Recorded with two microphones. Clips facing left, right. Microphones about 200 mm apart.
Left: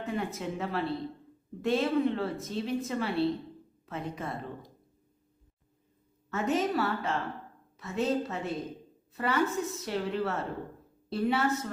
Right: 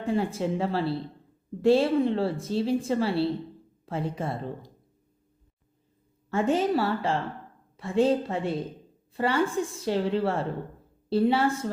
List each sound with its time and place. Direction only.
0.0 s a woman's voice: 30° right (ahead or behind)
6.3 s a woman's voice: 30° right (ahead or behind)